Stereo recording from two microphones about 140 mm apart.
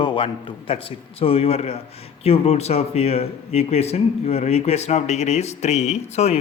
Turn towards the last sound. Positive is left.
turn(degrees=50)  # may be behind; listen again after turning